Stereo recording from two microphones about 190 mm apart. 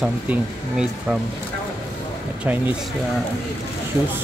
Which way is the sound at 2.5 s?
10° right (ahead or behind).